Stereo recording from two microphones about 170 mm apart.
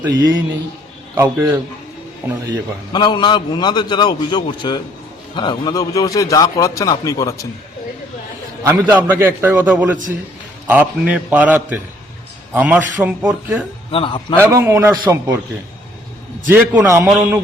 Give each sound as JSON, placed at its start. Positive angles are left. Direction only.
{"t": 0.0, "sound": "a man's voice", "side_deg": -20}
{"t": 2.9, "sound": "a man's voice", "side_deg": 25}
{"t": 8.6, "sound": "a man's voice", "side_deg": -10}
{"t": 13.9, "sound": "a man's voice", "side_deg": 30}
{"t": 14.3, "sound": "a man's voice", "side_deg": -15}
{"t": 16.5, "sound": "a man's voice", "side_deg": -10}